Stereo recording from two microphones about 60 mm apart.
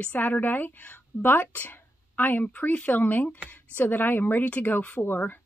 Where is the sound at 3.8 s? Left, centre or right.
Left.